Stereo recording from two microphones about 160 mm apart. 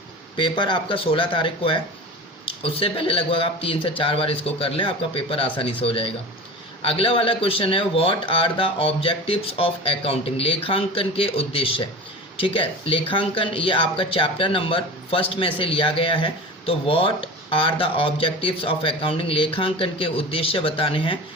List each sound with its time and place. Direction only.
0.3 s speech: 30° left (ahead or behind)